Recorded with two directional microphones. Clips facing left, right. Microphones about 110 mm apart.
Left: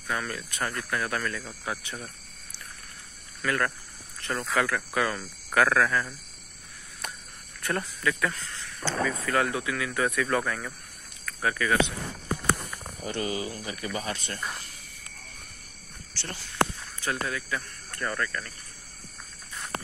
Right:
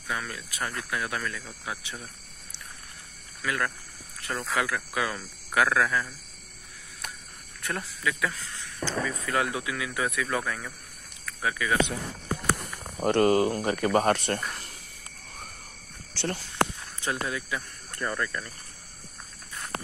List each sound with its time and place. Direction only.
0.1 s speech: 5° right (ahead or behind)
3.4 s speech: 5° right (ahead or behind)
7.6 s speech: centre (ahead or behind)
8.8 s speech: 15° right (ahead or behind)
13.0 s speech: 60° right (ahead or behind)
17.0 s speech: 20° right (ahead or behind)